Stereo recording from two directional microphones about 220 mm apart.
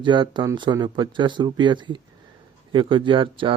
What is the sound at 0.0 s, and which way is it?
Speech, 20° right (ahead or behind).